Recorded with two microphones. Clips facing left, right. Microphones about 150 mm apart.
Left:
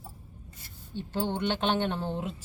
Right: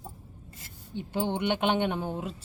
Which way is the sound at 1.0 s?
15° right (ahead or behind).